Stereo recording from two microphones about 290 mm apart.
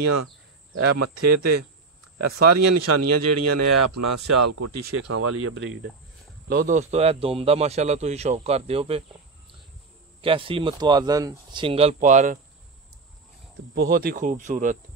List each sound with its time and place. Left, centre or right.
0.0 s speech: right
2.1 s speech: right
5.0 s speech: right
6.5 s a man's voice: right
10.2 s speech: centre
13.7 s a man's voice: right